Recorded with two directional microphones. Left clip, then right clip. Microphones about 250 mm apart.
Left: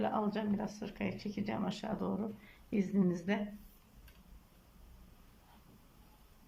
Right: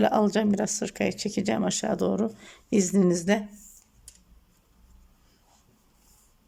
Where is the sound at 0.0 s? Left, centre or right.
Right.